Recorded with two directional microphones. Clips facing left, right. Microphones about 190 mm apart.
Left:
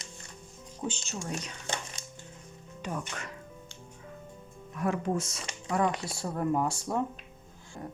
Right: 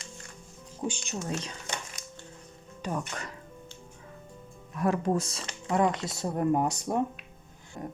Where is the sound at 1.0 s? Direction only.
25° right (ahead or behind).